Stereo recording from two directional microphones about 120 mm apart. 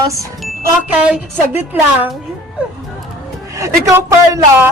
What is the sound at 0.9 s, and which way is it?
Speech, 15° right (ahead or behind).